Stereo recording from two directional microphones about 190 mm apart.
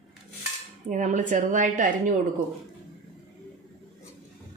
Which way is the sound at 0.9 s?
40° right (ahead or behind).